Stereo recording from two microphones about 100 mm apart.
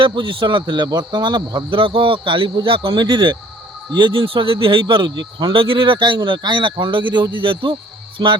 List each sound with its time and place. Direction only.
0.0 s speech: 55° right (ahead or behind)
1.8 s speech: 60° right (ahead or behind)
8.2 s speech: 45° right (ahead or behind)